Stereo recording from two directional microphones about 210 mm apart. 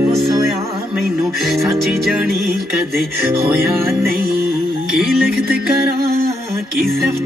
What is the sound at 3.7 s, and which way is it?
Music, centre (ahead or behind).